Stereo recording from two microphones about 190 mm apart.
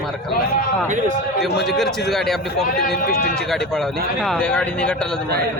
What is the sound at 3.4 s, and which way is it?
Speech, centre (ahead or behind).